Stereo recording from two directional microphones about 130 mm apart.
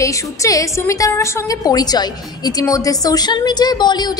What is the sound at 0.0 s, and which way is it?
A woman's voice, 25° left (ahead or behind).